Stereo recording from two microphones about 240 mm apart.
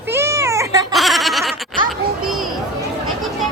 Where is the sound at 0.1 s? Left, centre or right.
Centre.